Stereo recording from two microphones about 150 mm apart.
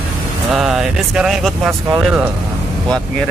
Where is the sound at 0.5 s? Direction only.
5° right (ahead or behind).